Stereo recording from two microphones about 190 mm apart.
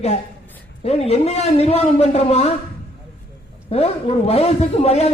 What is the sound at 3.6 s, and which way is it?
A man's voice, 30° left (ahead or behind).